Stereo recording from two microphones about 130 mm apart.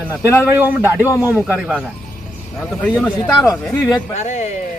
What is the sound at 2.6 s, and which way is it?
A man's voice, 10° left (ahead or behind).